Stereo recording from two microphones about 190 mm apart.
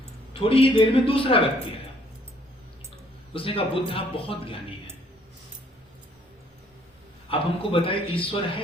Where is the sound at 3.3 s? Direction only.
30° left (ahead or behind).